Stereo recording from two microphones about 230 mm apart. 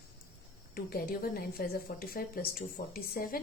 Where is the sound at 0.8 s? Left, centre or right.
Left.